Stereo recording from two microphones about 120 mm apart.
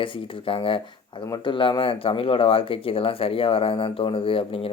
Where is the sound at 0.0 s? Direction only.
50° left (ahead or behind).